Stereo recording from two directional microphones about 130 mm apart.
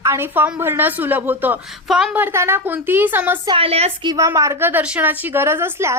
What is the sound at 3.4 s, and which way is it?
Speech, 45° right (ahead or behind).